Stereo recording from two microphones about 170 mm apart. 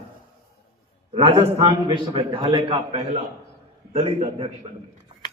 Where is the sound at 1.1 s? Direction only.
30° right (ahead or behind).